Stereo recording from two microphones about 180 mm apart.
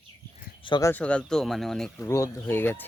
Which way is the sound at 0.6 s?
25° left (ahead or behind).